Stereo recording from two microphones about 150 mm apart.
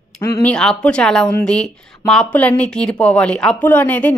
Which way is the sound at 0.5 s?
5° left (ahead or behind).